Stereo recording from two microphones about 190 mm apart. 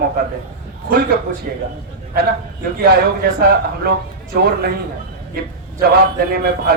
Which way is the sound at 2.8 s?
55° right (ahead or behind).